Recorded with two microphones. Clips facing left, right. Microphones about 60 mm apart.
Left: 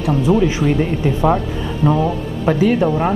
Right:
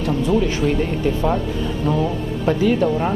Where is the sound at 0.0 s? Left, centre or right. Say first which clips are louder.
Left 3 dB; centre.